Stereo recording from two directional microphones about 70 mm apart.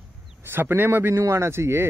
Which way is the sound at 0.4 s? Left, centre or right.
Right.